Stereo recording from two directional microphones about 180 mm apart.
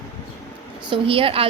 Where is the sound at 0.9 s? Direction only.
30° right (ahead or behind).